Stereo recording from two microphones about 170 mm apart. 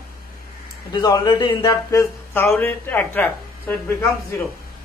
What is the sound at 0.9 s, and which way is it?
Speech, 25° left (ahead or behind).